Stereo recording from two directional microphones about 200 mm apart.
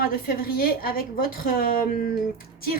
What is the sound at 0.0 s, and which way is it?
A woman's voice, 50° left (ahead or behind).